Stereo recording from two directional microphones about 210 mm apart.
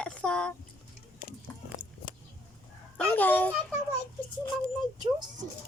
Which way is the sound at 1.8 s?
25° right (ahead or behind).